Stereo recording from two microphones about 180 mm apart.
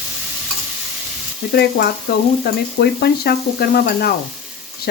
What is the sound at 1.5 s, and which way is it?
Frying, 65° left (ahead or behind).